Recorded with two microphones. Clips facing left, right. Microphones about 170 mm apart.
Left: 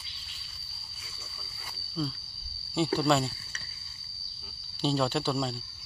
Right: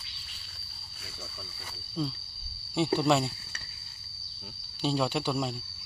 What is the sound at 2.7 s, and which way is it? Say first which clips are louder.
Speech: right 1 dB; 20° right (ahead or behind).